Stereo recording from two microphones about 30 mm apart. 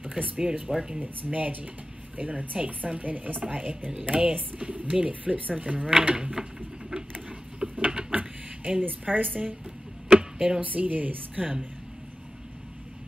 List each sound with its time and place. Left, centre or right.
0.1 s speech: right
0.7 s speech: right
0.9 s a woman's voice: right
5.2 s speech: right
6.1 s speech: right
7.6 s a sound: right
8.8 s a woman's voice: right
10.6 s a woman's voice: right